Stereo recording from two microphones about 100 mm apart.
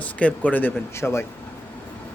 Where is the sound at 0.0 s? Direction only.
15° left (ahead or behind).